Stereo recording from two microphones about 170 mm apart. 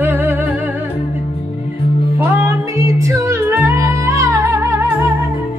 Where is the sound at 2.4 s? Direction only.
15° right (ahead or behind).